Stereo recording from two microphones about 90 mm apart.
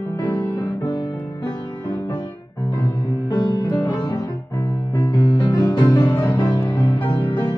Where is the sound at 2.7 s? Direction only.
55° left (ahead or behind).